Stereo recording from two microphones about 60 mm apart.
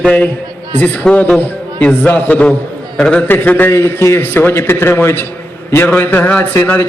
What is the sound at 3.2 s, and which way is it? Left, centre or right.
Speech, left.